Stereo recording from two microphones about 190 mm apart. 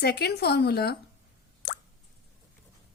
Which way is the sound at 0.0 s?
60° left (ahead or behind).